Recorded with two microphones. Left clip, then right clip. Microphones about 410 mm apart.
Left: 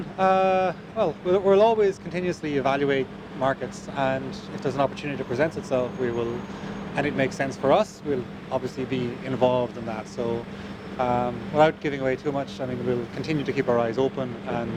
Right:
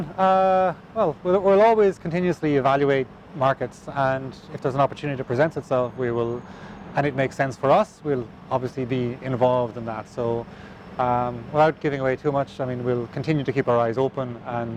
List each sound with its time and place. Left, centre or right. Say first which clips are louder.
0.2 s speech: right 2 dB; right